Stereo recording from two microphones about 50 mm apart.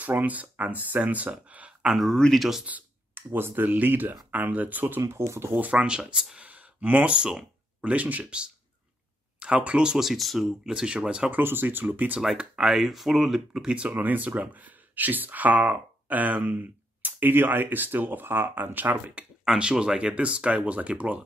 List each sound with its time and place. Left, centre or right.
0.0 s speech: right
1.9 s speech: centre
3.2 s speech: right
5.0 s speech: right
5.5 s speech: right
5.8 s speech: centre
6.3 s a sound: right
7.8 s speech: right
10.0 s speech: centre
10.6 s speech: centre
11.3 s speech: right
12.6 s speech: centre
13.5 s speech: centre
19.6 s speech: centre